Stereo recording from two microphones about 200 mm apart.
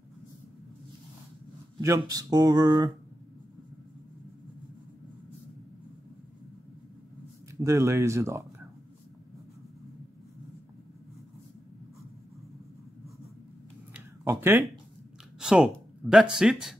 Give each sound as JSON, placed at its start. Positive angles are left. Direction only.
{"t": 1.8, "sound": "speech", "side_deg": -15}
{"t": 7.6, "sound": "speech", "side_deg": -15}
{"t": 13.9, "sound": "a sound", "side_deg": -10}
{"t": 15.4, "sound": "speech", "side_deg": -5}